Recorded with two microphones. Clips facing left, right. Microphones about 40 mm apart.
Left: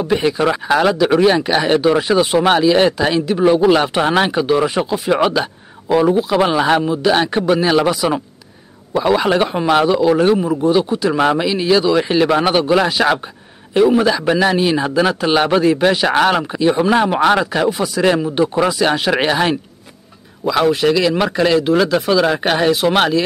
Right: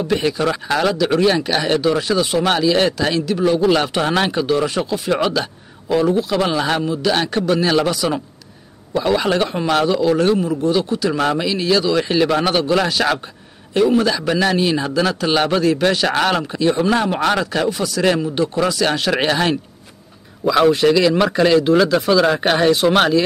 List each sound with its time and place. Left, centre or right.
0.0 s speech: centre